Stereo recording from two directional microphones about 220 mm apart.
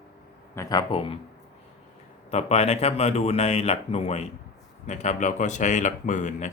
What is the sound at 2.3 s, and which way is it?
Speech, 30° left (ahead or behind).